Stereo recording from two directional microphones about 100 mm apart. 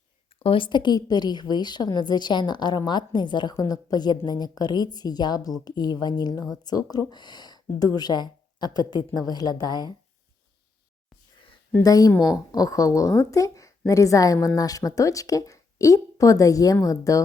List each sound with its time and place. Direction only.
0.3 s a woman's voice: 65° left (ahead or behind); by 3.5 s 50° left (ahead or behind)
3.5 s a woman's voice: 40° left (ahead or behind)
11.8 s a woman's voice: 40° left (ahead or behind)